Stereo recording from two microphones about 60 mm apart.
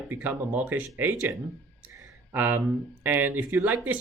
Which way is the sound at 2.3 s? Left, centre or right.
Right.